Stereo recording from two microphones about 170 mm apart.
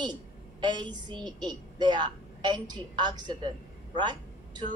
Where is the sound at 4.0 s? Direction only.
25° right (ahead or behind).